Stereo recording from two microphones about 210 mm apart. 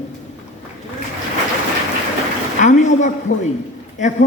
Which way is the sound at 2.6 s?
35° left (ahead or behind).